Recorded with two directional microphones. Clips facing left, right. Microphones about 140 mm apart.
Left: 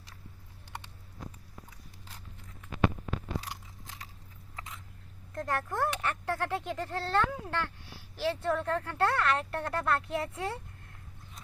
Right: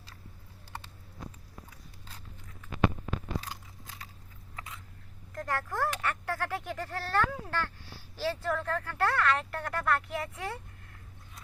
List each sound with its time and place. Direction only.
3.5 s biting: 20° left (ahead or behind)
5.3 s speech: 25° left (ahead or behind)